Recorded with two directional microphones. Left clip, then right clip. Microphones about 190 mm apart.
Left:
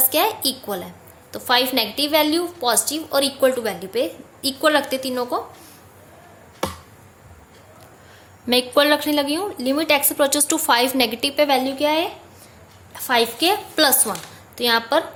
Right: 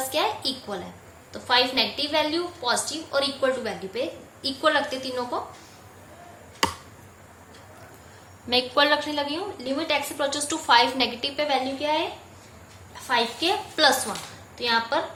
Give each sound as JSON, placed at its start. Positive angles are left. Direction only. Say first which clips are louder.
{"t": 0.0, "sound": "a sound", "louder": "left 5 dB", "side_deg": 60}
{"t": 1.3, "sound": "a woman's voice", "louder": "left 3 dB", "side_deg": 60}
{"t": 8.4, "sound": "a woman's voice", "louder": "left 4 dB", "side_deg": 50}